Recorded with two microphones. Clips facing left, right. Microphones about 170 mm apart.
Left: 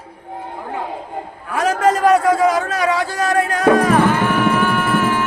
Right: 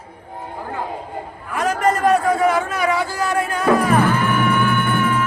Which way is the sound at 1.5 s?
90° left.